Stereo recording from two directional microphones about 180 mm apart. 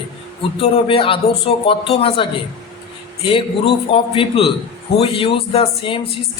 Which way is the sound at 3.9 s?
30° left (ahead or behind).